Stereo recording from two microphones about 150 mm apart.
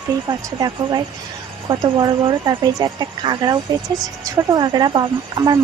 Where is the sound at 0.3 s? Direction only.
25° right (ahead or behind).